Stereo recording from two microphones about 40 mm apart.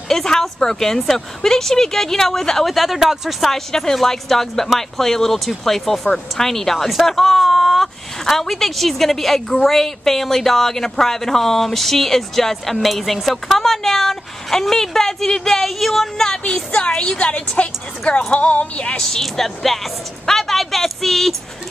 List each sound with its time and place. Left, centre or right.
0.1 s a woman's voice: centre
2.7 s a woman's voice: centre; by 17.4 s left
18.0 s music: centre
19.2 s a woman's voice: centre